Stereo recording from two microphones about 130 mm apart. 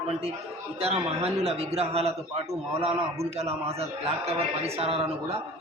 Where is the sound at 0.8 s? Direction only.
50° right (ahead or behind).